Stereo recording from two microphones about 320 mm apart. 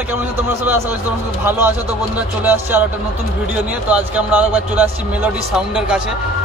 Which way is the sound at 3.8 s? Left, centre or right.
Centre.